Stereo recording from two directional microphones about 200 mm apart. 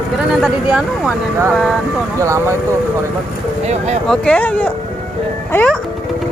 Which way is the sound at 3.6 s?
35° right (ahead or behind).